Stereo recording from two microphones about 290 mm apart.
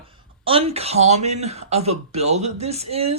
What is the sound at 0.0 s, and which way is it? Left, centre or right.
Speech, centre.